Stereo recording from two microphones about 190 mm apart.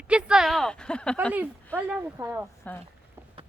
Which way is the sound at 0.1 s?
5° right (ahead or behind).